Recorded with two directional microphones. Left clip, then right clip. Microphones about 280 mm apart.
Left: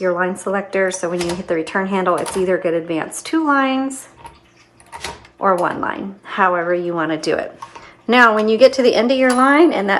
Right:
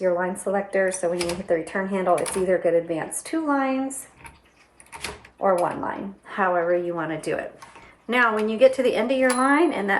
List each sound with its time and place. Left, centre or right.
0.0 s speech: centre
5.4 s speech: centre